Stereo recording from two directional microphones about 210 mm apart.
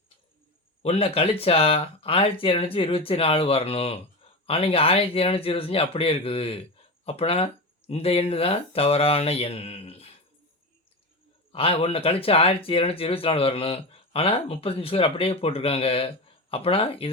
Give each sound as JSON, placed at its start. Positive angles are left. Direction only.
{"t": 0.8, "sound": "speech", "side_deg": 30}
{"t": 11.5, "sound": "speech", "side_deg": 25}